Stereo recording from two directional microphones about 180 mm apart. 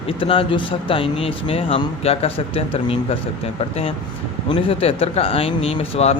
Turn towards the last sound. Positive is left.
turn(degrees=35)  # may be behind; listen again after turning